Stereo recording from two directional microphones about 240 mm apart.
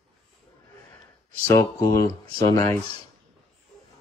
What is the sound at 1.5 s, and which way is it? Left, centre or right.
Speech, centre.